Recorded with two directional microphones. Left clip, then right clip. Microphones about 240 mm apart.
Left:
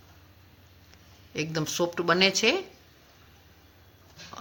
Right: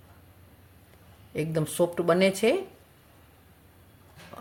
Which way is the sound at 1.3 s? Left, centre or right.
Centre.